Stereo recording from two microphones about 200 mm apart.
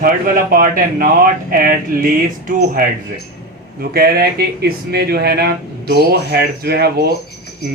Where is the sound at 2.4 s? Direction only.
45° right (ahead or behind).